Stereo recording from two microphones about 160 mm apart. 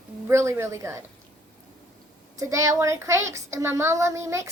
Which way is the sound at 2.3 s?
20° right (ahead or behind).